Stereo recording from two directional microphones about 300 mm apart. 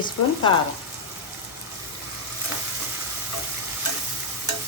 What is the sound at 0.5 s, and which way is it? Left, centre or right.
Speech, centre.